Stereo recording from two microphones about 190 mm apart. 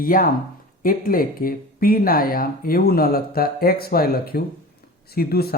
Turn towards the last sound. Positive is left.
turn(degrees=55)  # may be behind; listen again after turning